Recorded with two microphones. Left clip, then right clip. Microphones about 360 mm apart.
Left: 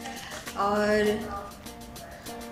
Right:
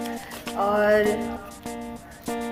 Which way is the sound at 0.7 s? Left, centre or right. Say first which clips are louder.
Right 7 dB; centre.